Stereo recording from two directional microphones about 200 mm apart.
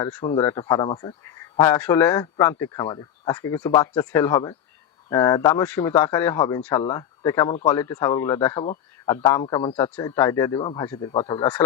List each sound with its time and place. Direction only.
0.0 s speech: 15° left (ahead or behind)
9.4 s speech: 25° left (ahead or behind)
9.7 s speech: 10° left (ahead or behind)